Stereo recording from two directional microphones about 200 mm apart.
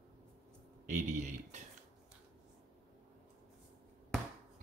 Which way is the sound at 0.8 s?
35° right (ahead or behind).